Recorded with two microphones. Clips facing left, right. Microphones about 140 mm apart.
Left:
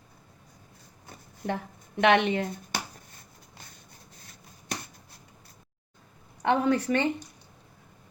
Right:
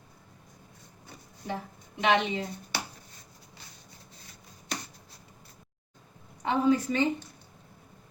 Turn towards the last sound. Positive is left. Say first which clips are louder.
# even
turn(degrees=65)  # may be behind; listen again after turning